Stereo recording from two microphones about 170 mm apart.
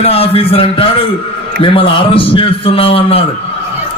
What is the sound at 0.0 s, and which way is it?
A man's voice, 35° left (ahead or behind).